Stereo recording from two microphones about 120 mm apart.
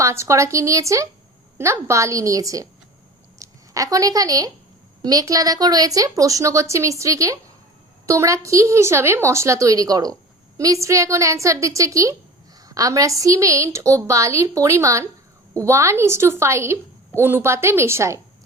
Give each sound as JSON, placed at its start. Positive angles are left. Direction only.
{"t": 0.0, "sound": "a woman's voice", "side_deg": -25}